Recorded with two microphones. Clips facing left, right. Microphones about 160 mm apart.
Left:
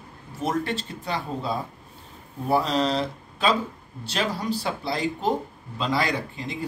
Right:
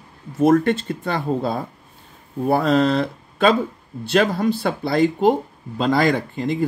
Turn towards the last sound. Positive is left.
turn(degrees=-50)  # may be behind; listen again after turning